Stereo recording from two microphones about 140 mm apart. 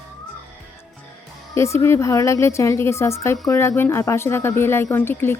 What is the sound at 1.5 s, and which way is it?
A woman's voice, 20° left (ahead or behind).